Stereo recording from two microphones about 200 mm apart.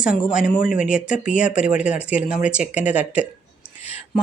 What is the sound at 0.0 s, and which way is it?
Speech, 5° right (ahead or behind).